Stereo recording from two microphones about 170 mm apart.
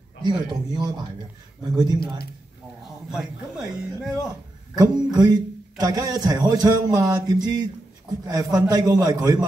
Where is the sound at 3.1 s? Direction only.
Centre (ahead or behind).